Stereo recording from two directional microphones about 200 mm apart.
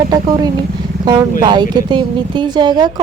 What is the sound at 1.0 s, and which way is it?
A woman's voice, 20° right (ahead or behind).